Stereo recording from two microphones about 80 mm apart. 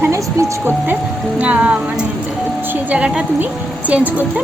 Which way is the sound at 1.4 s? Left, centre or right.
Centre.